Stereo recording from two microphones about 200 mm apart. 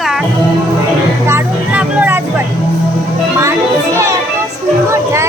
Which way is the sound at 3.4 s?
15° right (ahead or behind).